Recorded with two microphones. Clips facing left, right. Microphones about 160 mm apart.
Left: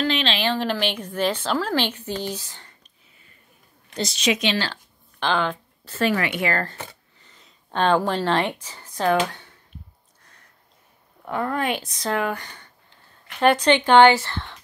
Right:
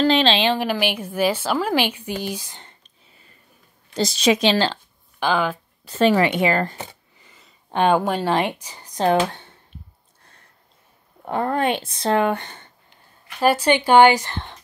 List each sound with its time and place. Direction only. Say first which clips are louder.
0.0 s a woman's voice: right 6 dB; 35° right (ahead or behind)
0.4 s a woman's voice: right 3 dB; 15° right (ahead or behind)
3.9 s a woman's voice: right 5 dB; 35° right (ahead or behind)
5.2 s speech: right 2 dB; 10° right (ahead or behind)
5.9 s speech: right 6 dB; 25° right (ahead or behind)
9.0 s speech: right 2 dB; 25° right (ahead or behind)
11.2 s speech: right 3 dB; 30° right (ahead or behind)
13.4 s a woman's voice: even; 5° right (ahead or behind)